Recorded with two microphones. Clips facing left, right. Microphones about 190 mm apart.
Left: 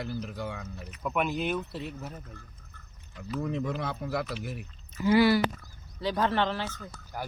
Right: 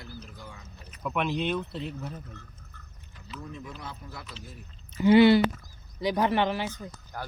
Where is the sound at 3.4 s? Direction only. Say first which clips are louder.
Left 10 dB; 75° left (ahead or behind).